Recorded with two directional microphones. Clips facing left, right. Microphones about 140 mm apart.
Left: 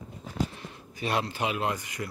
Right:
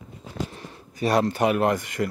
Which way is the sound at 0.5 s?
40° right (ahead or behind).